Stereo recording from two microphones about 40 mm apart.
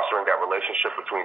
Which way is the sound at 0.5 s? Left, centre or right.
Centre.